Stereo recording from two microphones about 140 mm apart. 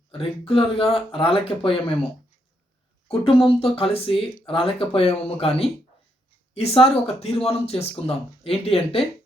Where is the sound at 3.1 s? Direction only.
40° left (ahead or behind).